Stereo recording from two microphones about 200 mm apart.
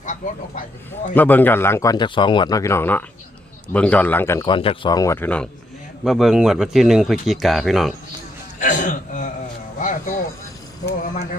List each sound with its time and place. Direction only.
0.0 s a sound: 40° left (ahead or behind)
1.1 s speech: 10° left (ahead or behind)
8.5 s a man's voice: 40° left (ahead or behind)
9.7 s music: 40° left (ahead or behind)
10.8 s speech: 40° left (ahead or behind)